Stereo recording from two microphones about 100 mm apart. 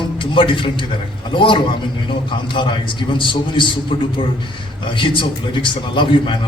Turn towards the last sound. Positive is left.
turn(degrees=55)  # may be behind; listen again after turning